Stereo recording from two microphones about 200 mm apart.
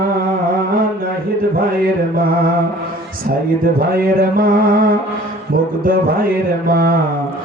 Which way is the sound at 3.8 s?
45° right (ahead or behind).